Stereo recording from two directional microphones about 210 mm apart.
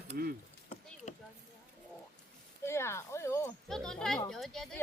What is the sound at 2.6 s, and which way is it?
Speech, 10° left (ahead or behind).